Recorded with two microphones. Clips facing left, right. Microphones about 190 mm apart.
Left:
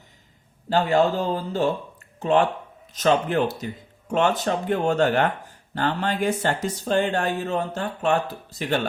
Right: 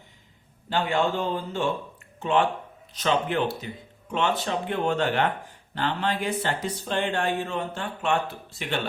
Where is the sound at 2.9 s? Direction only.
45° left (ahead or behind).